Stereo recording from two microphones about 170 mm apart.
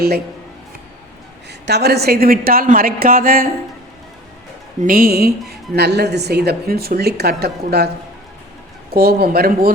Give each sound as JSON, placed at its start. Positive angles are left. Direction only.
{"t": 1.6, "sound": "a woman's voice", "side_deg": -75}
{"t": 4.8, "sound": "a woman's voice", "side_deg": -60}
{"t": 9.0, "sound": "a woman's voice", "side_deg": -65}